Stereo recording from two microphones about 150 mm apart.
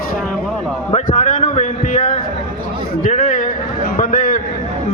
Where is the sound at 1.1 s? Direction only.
60° left (ahead or behind).